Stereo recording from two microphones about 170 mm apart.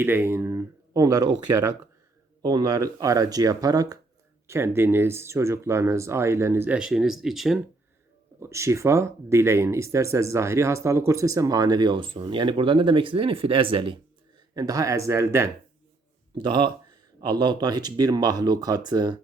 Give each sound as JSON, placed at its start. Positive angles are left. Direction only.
{"t": 0.0, "sound": "speech", "side_deg": -10}
{"t": 8.4, "sound": "speech", "side_deg": -15}
{"t": 16.4, "sound": "speech", "side_deg": -25}